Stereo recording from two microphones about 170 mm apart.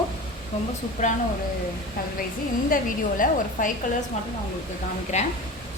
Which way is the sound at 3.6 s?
50° left (ahead or behind).